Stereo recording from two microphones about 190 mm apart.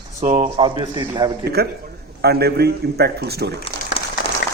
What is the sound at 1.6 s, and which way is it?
Speech, 55° right (ahead or behind).